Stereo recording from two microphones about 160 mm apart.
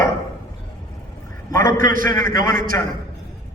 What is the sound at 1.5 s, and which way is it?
A man's voice, 60° right (ahead or behind).